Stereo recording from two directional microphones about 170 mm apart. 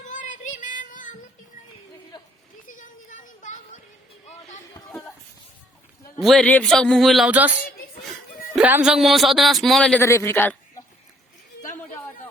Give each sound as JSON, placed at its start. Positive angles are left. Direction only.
{"t": 0.1, "sound": "child singing", "side_deg": 50}
{"t": 2.6, "sound": "a sound", "side_deg": 50}
{"t": 6.1, "sound": "speech", "side_deg": 0}
{"t": 8.5, "sound": "speech", "side_deg": -5}
{"t": 10.0, "sound": "a man's voice", "side_deg": 15}